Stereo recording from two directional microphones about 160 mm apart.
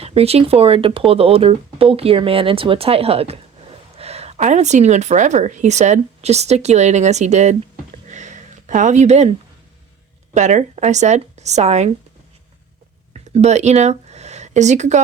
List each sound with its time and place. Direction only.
0.0 s speech: 40° right (ahead or behind)
8.0 s a sound: 50° right (ahead or behind)
10.3 s speech: 50° right (ahead or behind)
13.3 s speech: 45° right (ahead or behind)